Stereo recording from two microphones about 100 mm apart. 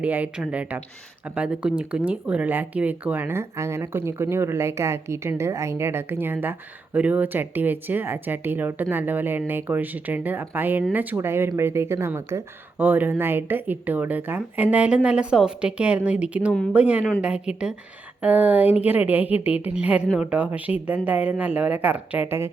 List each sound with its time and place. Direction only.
0.0 s speech: 15° right (ahead or behind)